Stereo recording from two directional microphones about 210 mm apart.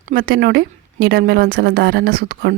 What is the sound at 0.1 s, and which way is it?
A woman's voice, 45° right (ahead or behind).